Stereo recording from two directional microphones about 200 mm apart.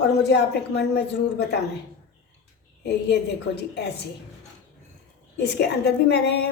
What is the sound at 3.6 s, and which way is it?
Speech, 55° left (ahead or behind).